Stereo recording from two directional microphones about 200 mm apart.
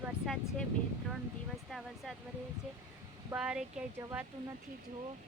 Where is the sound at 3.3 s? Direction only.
5° right (ahead or behind).